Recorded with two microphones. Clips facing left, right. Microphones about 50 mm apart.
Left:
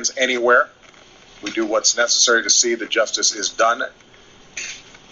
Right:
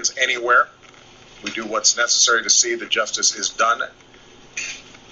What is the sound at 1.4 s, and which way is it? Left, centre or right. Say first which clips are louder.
A man's voice: left 4 dB; right.